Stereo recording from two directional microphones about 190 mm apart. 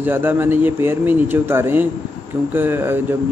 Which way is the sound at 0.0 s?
10° right (ahead or behind).